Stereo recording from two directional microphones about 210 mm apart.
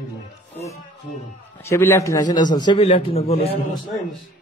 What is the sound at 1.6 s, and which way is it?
A man's voice, 10° left (ahead or behind).